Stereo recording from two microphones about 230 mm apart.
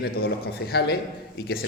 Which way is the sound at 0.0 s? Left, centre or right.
Left.